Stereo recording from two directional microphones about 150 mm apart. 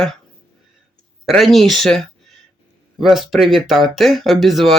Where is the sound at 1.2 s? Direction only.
Centre (ahead or behind).